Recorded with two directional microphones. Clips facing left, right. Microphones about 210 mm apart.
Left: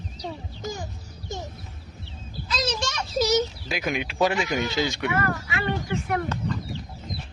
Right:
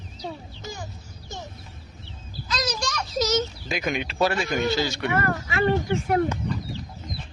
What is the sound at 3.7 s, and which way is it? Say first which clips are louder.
Speech: right 1 dB; 5° left (ahead or behind).